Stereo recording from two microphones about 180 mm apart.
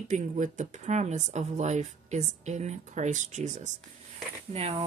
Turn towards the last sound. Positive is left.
turn(degrees=-35)  # may be behind; listen again after turning